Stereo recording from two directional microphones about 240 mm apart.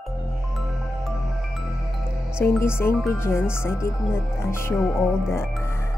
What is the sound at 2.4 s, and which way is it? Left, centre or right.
Speech, centre.